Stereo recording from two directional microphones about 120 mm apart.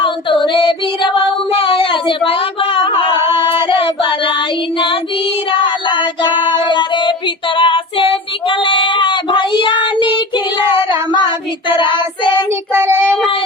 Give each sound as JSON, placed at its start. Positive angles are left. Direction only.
{"t": 0.4, "sound": "child singing", "side_deg": 40}
{"t": 5.5, "sound": "child singing", "side_deg": 45}
{"t": 12.7, "sound": "child singing", "side_deg": -20}